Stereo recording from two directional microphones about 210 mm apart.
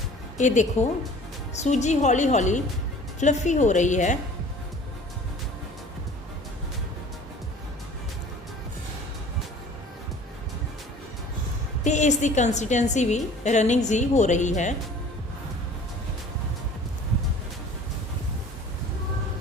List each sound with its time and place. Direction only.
0.3 s a woman's voice: 35° left (ahead or behind)
11.8 s a woman's voice: 35° left (ahead or behind)